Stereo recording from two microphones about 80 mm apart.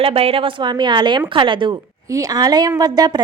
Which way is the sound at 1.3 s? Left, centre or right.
Right.